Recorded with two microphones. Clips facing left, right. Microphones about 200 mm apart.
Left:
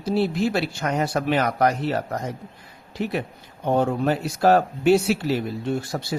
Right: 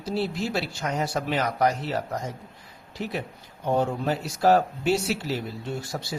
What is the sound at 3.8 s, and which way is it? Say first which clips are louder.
A man's voice: left 4 dB; 60° left (ahead or behind).